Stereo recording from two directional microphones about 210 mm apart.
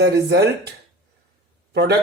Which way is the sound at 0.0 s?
50° right (ahead or behind).